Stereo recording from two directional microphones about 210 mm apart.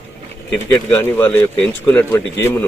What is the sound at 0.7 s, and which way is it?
A man's voice, 10° left (ahead or behind).